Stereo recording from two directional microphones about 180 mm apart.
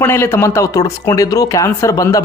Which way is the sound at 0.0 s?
15° left (ahead or behind).